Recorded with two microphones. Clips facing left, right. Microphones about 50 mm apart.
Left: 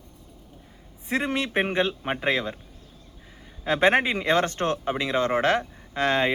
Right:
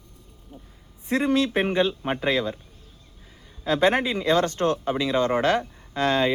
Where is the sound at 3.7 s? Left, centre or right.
Left.